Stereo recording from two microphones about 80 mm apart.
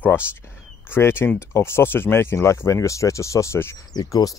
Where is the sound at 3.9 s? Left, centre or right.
Left.